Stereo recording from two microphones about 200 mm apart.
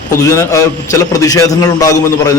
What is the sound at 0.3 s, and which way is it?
A man's voice, 15° left (ahead or behind).